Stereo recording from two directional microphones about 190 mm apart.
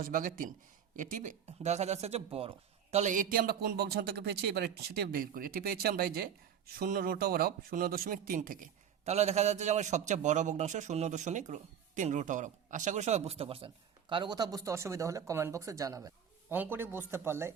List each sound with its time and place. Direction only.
0.0 s a man's voice: 45° right (ahead or behind); by 17.5 s 15° right (ahead or behind)